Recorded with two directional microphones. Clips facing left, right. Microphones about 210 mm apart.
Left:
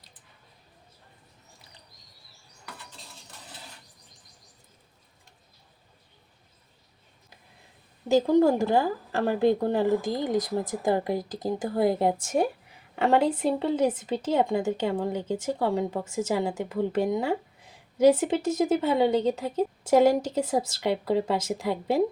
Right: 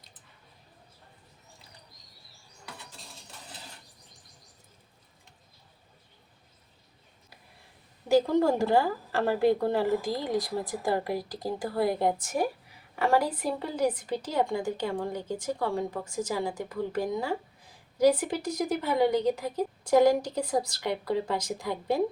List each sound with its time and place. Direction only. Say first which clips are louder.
8.3 s speech: left 3 dB; 15° left (ahead or behind)